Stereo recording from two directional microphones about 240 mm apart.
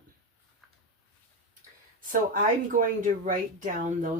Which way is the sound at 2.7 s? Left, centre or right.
Right.